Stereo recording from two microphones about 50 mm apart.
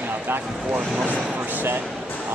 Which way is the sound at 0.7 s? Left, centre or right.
Right.